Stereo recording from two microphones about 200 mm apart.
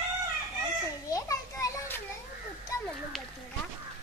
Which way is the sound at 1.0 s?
15° left (ahead or behind).